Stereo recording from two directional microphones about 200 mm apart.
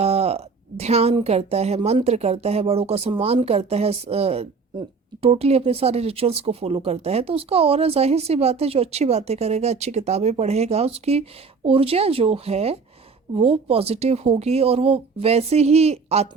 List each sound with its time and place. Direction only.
0.0 s speech: 30° right (ahead or behind)